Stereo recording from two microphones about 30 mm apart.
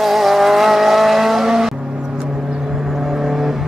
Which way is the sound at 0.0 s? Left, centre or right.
Centre.